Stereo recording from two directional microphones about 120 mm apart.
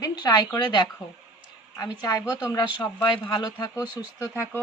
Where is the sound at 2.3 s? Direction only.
30° left (ahead or behind).